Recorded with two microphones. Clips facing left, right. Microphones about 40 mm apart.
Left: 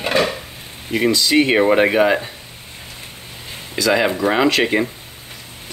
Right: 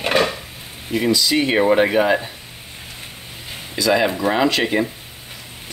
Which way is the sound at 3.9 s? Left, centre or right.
Centre.